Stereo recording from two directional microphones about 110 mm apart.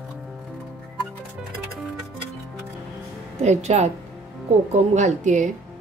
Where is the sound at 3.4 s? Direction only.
90° right.